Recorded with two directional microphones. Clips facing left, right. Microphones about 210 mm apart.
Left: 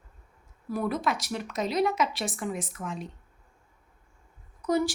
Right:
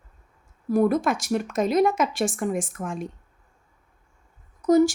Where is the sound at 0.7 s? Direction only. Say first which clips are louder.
Right 8 dB; 45° right (ahead or behind).